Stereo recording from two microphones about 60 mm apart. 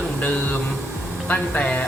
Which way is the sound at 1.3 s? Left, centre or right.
Left.